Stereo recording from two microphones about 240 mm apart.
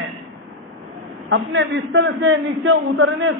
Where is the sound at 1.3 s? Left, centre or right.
Right.